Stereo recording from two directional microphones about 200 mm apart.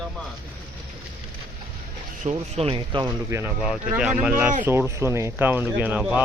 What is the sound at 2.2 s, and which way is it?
Speech, 35° right (ahead or behind).